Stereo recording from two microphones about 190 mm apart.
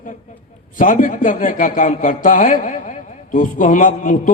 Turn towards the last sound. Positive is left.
turn(degrees=45)  # may be behind; listen again after turning